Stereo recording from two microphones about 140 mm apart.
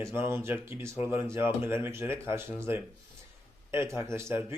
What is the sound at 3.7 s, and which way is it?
Mantra, 20° right (ahead or behind).